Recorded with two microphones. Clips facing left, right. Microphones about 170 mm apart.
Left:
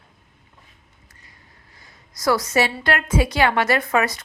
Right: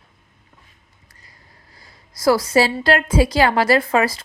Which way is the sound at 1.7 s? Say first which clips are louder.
Right 1 dB; 30° right (ahead or behind).